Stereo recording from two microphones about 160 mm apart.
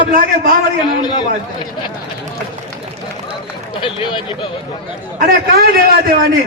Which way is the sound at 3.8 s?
30° left (ahead or behind).